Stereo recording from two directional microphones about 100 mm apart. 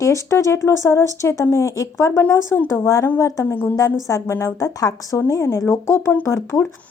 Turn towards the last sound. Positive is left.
turn(degrees=30)  # may be behind; listen again after turning